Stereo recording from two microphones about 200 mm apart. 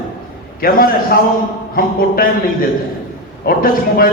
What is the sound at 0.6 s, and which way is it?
Speech, 45° left (ahead or behind).